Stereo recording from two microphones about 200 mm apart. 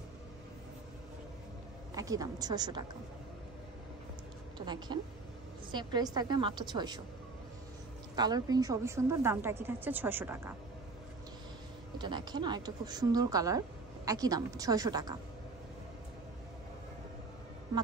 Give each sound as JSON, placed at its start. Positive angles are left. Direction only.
{"t": 2.0, "sound": "a woman's voice", "side_deg": -15}
{"t": 4.6, "sound": "a woman's voice", "side_deg": -20}
{"t": 8.2, "sound": "a woman's voice", "side_deg": -20}
{"t": 12.0, "sound": "a woman's voice", "side_deg": -20}